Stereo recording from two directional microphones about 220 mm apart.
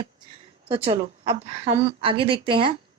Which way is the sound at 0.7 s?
25° right (ahead or behind).